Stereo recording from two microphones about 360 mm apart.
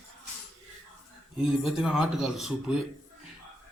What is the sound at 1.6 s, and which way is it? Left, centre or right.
A man's voice, centre.